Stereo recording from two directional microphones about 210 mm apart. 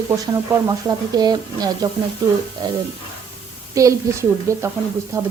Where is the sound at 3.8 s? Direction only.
15° right (ahead or behind).